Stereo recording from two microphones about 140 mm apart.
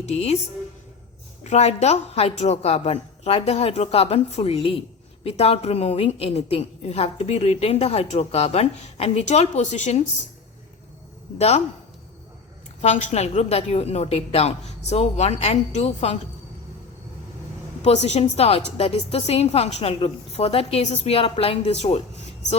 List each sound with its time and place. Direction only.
0.0 s a woman's voice: 50° left (ahead or behind)
1.5 s a woman's voice: 50° left (ahead or behind)
11.3 s a woman's voice: 50° left (ahead or behind)
12.8 s a woman's voice: 55° left (ahead or behind)
17.8 s a woman's voice: 50° left (ahead or behind)